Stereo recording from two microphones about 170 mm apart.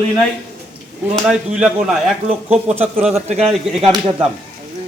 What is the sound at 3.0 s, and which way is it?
Speech, 40° right (ahead or behind).